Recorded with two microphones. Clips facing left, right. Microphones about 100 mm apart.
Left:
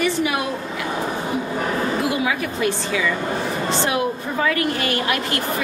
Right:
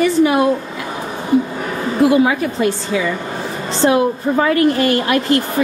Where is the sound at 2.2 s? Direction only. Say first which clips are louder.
Right 5 dB; 30° right (ahead or behind).